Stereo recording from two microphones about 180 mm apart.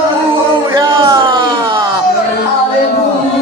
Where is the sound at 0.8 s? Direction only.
25° right (ahead or behind).